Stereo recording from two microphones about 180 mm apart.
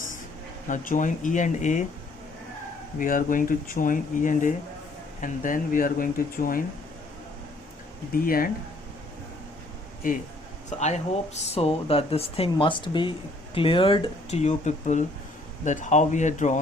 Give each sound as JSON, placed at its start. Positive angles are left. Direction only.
{"t": 0.7, "sound": "speech", "side_deg": 45}
{"t": 3.0, "sound": "speech", "side_deg": 45}
{"t": 8.1, "sound": "speech", "side_deg": 55}
{"t": 10.7, "sound": "speech", "side_deg": 40}